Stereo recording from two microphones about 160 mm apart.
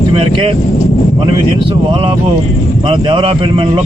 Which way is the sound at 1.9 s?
30° right (ahead or behind).